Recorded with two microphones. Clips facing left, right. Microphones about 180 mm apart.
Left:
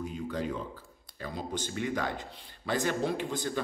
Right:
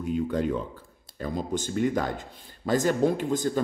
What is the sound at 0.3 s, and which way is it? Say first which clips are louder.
Speech: right 7 dB; 50° right (ahead or behind).